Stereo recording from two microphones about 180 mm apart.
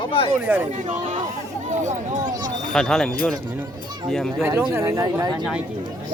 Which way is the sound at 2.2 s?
20° right (ahead or behind).